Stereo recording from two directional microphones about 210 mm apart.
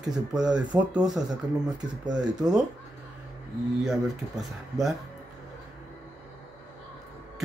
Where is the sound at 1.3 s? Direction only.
15° right (ahead or behind).